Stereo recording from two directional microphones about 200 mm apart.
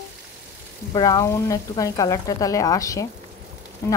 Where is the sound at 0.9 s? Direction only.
20° left (ahead or behind).